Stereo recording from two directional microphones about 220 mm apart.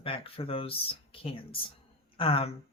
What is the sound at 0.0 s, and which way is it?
Speech, 25° left (ahead or behind).